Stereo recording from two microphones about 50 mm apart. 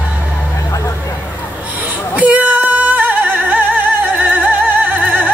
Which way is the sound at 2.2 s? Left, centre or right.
Right.